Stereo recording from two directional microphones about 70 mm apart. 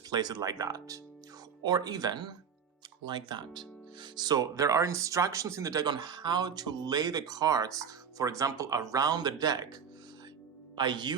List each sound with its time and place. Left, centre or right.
0.1 s speech: right
1.6 s speech: right
3.1 s speech: right
5.8 s speech: right
10.8 s speech: right